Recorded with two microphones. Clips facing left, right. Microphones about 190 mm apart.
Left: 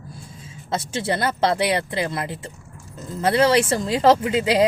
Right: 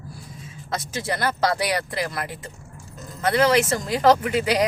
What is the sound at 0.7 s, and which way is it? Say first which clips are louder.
Speech: left 4 dB; 25° left (ahead or behind).